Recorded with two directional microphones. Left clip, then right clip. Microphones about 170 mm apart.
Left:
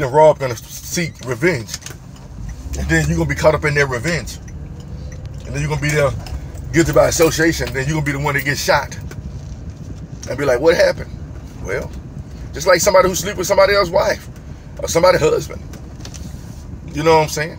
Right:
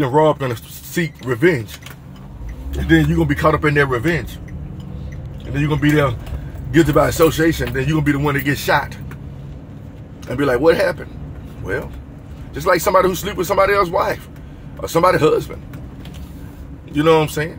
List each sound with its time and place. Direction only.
0.0 s speech: 15° right (ahead or behind)
2.9 s speech: 15° right (ahead or behind)
6.7 s speech: 15° right (ahead or behind)
10.2 s speech: 15° right (ahead or behind)
12.5 s speech: 15° right (ahead or behind)
16.9 s speech: 15° right (ahead or behind)